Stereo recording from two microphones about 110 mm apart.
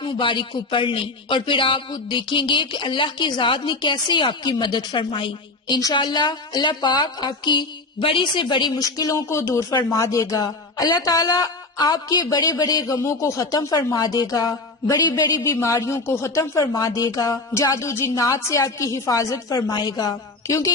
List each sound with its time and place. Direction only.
0.0 s a man's voice: 50° left (ahead or behind); by 20.7 s 35° left (ahead or behind)